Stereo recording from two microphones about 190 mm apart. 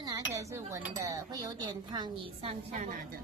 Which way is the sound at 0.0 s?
15° right (ahead or behind).